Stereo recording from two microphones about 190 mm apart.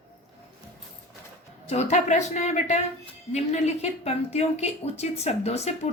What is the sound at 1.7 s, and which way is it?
A woman's voice, 35° left (ahead or behind).